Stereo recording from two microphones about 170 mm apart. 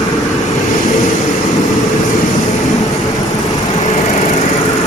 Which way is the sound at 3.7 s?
45° left (ahead or behind).